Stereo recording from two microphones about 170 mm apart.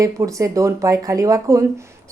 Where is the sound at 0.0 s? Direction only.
20° right (ahead or behind).